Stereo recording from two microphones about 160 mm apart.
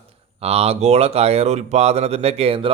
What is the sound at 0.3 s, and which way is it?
Speech, 40° right (ahead or behind).